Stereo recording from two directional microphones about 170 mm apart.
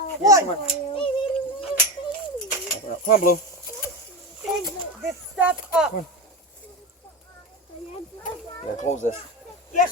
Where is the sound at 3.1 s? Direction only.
55° left (ahead or behind).